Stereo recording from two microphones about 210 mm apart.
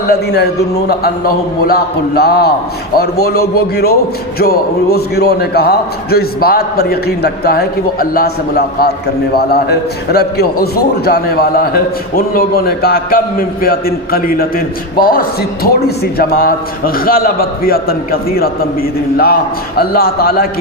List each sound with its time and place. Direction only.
0.1 s a man's voice: 50° left (ahead or behind)